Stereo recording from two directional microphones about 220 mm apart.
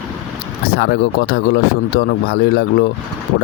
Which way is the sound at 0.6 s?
45° left (ahead or behind).